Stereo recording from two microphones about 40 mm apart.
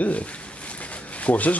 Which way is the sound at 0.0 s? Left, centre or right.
Left.